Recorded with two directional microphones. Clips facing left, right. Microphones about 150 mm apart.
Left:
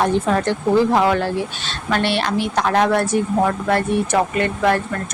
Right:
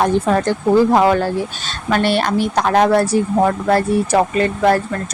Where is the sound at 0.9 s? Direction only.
40° right (ahead or behind).